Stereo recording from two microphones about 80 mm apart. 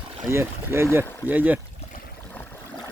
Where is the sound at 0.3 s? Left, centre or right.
Right.